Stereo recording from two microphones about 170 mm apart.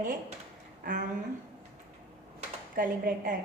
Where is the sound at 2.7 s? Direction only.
55° right (ahead or behind).